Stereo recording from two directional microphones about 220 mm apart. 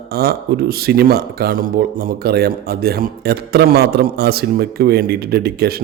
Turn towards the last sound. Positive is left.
turn(degrees=-45)  # may be behind; listen again after turning